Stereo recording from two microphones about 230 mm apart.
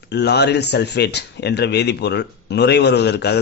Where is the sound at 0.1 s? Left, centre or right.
Left.